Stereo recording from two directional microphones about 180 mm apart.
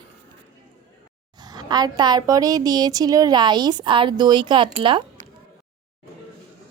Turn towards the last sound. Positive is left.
turn(degrees=-30)  # may be behind; listen again after turning